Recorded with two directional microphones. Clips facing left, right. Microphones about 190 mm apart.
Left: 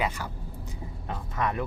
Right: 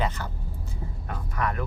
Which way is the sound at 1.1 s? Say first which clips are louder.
Even; 20° left (ahead or behind).